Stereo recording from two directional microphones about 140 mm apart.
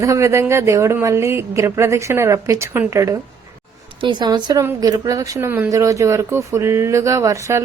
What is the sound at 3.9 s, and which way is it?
A woman's voice, 35° right (ahead or behind).